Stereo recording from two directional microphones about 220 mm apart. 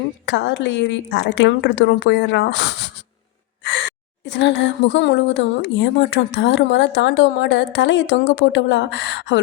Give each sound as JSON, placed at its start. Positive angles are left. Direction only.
{"t": 0.3, "sound": "a woman's voice", "side_deg": 55}